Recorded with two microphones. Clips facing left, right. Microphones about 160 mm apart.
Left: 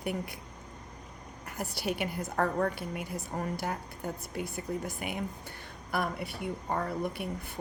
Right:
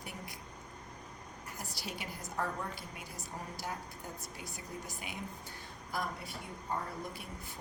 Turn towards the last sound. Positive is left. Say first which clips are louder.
# left 7 dB
turn(degrees=65)  # may be behind; listen again after turning